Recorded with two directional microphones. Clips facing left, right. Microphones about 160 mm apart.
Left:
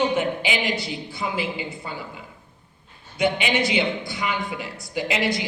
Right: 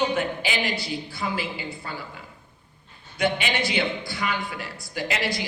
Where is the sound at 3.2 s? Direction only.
20° left (ahead or behind).